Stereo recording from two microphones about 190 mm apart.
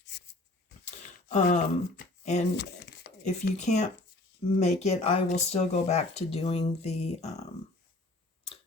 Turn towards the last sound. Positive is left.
turn(degrees=35)  # may be behind; listen again after turning